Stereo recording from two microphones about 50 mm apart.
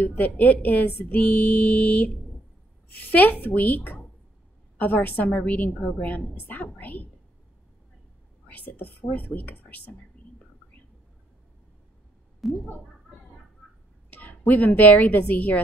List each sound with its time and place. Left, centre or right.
0.0 s speech: left
5.3 s speech: left
8.5 s speech: left
10.1 s a sound: left
12.4 s a sound: centre
14.8 s speech: left